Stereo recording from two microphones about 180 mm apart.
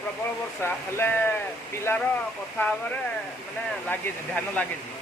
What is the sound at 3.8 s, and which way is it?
Speech, 10° left (ahead or behind).